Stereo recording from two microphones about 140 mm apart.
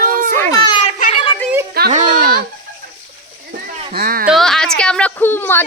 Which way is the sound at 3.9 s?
90° right.